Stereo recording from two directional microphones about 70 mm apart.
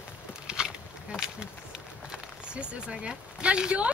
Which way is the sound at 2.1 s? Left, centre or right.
Centre.